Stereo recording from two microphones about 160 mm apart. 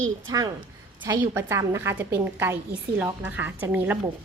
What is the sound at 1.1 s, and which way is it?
A woman's voice, 15° right (ahead or behind).